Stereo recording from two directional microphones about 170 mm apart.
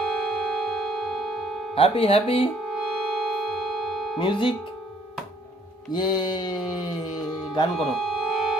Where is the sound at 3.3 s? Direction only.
Centre (ahead or behind).